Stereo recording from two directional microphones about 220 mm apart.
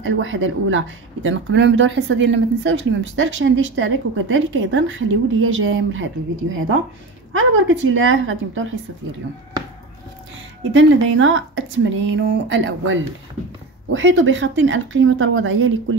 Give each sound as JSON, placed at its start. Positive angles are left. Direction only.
{"t": 0.0, "sound": "speech", "side_deg": -60}
{"t": 7.3, "sound": "speech", "side_deg": -60}
{"t": 10.7, "sound": "speech", "side_deg": -60}